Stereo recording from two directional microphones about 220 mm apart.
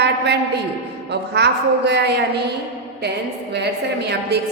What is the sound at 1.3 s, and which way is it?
A woman's voice, 50° right (ahead or behind).